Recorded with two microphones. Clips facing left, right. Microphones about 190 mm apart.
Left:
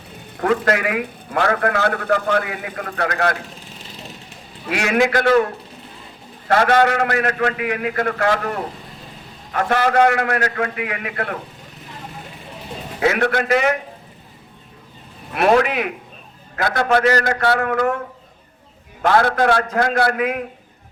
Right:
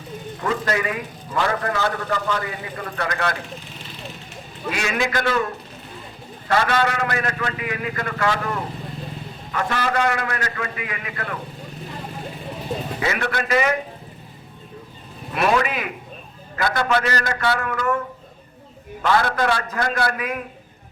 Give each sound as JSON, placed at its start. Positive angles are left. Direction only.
{"t": 0.3, "sound": "a man's voice", "side_deg": 60}
{"t": 4.7, "sound": "a man's voice", "side_deg": 65}
{"t": 6.5, "sound": "a man's voice", "side_deg": 55}
{"t": 13.0, "sound": "a man's voice", "side_deg": 55}
{"t": 15.4, "sound": "a man's voice", "side_deg": 60}
{"t": 19.0, "sound": "a man's voice", "side_deg": 55}